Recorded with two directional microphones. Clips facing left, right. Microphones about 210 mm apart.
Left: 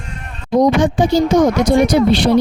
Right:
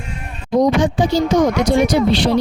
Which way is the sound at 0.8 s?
55° left (ahead or behind).